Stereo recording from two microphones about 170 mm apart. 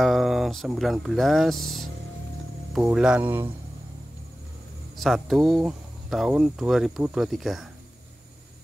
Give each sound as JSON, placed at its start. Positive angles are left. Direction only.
{"t": 0.0, "sound": "speech", "side_deg": 0}
{"t": 2.9, "sound": "speech", "side_deg": -5}
{"t": 4.9, "sound": "speech", "side_deg": 0}